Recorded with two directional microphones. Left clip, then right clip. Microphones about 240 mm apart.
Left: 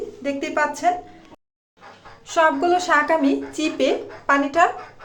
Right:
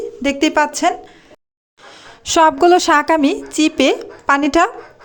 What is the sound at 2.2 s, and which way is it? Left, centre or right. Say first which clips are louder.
A woman's voice: right 7 dB; right.